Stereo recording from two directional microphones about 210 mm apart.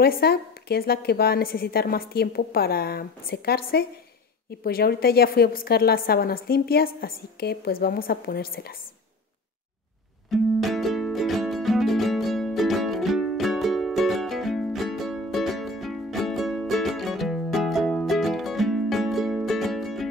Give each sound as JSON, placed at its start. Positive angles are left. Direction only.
{"t": 0.0, "sound": "a woman's voice", "side_deg": 50}
{"t": 10.3, "sound": "music", "side_deg": 0}